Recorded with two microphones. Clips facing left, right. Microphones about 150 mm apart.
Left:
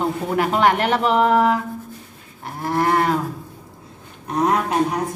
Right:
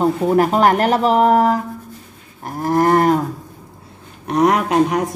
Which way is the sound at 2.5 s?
40° right (ahead or behind).